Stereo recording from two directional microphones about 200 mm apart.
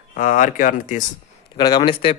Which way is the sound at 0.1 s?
40° left (ahead or behind).